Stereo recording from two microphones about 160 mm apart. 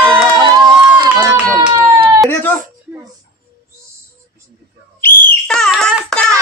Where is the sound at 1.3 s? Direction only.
10° right (ahead or behind).